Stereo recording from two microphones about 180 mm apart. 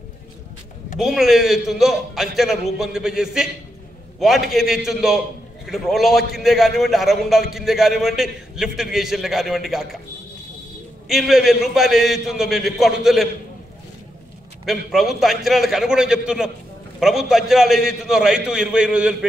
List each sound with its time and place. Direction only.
0.9 s a man's voice: centre (ahead or behind)
11.1 s a man's voice: centre (ahead or behind)
14.7 s a man's voice: centre (ahead or behind)